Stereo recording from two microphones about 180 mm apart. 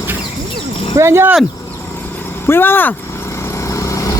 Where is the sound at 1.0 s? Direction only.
15° right (ahead or behind).